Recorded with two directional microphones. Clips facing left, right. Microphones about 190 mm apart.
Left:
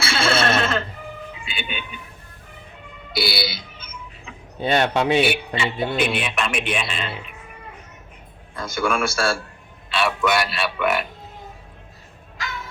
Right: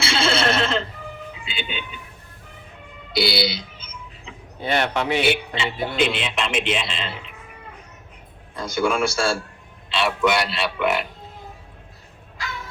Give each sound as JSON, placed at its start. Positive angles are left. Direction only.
{"t": 0.0, "sound": "a sound", "side_deg": -25}
{"t": 1.5, "sound": "speech", "side_deg": -25}
{"t": 3.2, "sound": "speech", "side_deg": -25}
{"t": 4.6, "sound": "speech", "side_deg": 25}
{"t": 6.0, "sound": "speech", "side_deg": -25}
{"t": 8.5, "sound": "speech", "side_deg": -25}